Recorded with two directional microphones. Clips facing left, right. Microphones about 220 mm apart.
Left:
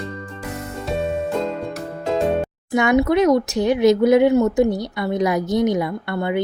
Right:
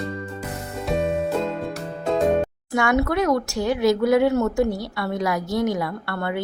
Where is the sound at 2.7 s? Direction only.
20° left (ahead or behind).